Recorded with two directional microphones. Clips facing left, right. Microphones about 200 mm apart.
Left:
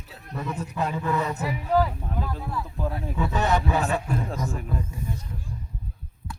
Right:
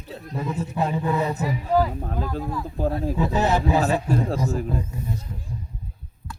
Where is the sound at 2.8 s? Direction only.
35° right (ahead or behind).